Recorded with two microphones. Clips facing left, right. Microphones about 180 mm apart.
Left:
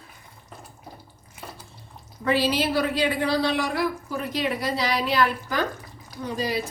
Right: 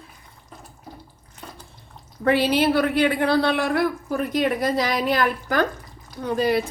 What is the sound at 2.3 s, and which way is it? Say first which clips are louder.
A woman's voice: right 4 dB; 60° right (ahead or behind).